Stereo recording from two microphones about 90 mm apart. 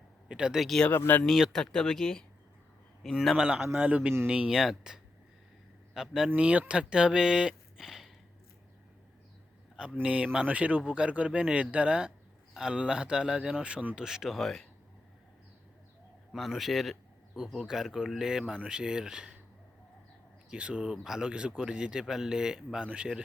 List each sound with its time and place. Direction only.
0.3 s speech: 10° right (ahead or behind)
0.9 s speech: 25° left (ahead or behind)
1.2 s a man's voice: 5° left (ahead or behind)
9.7 s a man's voice: 10° right (ahead or behind)
16.3 s a man's voice: centre (ahead or behind)
20.5 s a man's voice: 10° right (ahead or behind)